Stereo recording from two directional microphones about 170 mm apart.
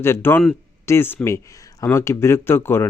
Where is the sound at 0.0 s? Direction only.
15° left (ahead or behind).